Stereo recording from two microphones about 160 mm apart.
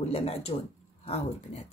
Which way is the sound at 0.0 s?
40° left (ahead or behind).